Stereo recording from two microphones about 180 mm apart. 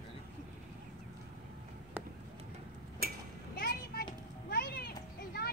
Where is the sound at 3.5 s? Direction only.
55° left (ahead or behind).